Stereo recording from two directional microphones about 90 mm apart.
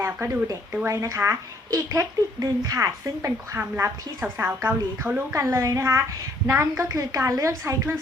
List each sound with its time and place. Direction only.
0.0 s a woman's voice: 35° right (ahead or behind)